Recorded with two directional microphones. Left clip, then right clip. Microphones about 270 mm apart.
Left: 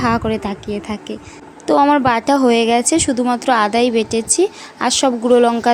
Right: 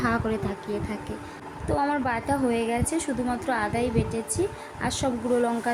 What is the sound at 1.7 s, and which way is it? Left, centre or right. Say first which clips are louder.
A woman's voice: left 13 dB; left.